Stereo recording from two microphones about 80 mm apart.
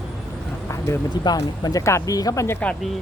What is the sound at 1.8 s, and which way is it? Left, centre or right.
Speech, left.